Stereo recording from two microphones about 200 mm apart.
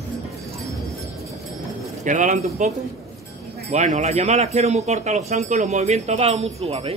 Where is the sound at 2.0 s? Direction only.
35° right (ahead or behind).